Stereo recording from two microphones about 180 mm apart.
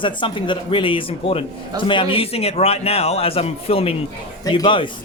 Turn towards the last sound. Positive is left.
turn(degrees=30)  # may be behind; listen again after turning